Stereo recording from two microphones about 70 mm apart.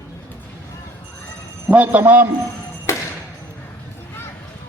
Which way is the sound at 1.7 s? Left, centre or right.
Right.